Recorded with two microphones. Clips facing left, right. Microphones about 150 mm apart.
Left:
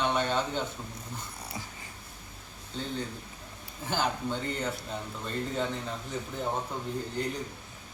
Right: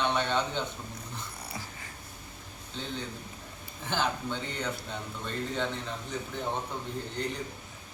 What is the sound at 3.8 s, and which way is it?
Speech, 10° left (ahead or behind).